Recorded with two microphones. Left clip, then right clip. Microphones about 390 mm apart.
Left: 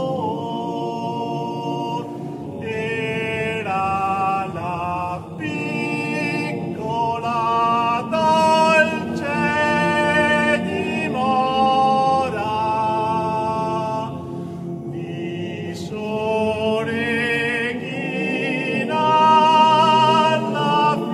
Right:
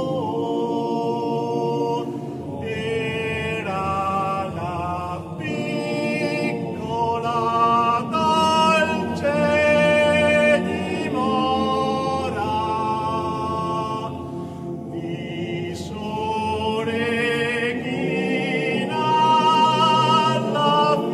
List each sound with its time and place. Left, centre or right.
3.7 s mantra: left
7.2 s singing: left
9.5 s music: left
16.3 s chant: left
19.1 s music: left